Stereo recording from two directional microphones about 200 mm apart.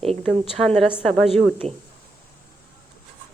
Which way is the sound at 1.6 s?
30° right (ahead or behind).